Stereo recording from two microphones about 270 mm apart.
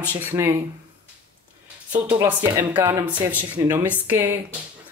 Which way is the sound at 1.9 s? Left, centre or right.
Centre.